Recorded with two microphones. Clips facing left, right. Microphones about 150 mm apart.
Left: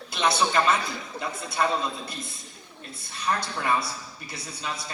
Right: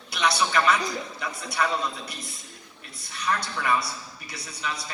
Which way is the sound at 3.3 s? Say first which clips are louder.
Even; 25° left (ahead or behind).